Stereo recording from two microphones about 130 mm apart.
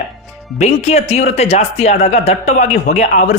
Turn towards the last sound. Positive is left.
turn(degrees=65)  # may be behind; listen again after turning